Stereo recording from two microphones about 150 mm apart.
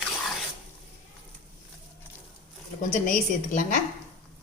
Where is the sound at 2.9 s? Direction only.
65° left (ahead or behind).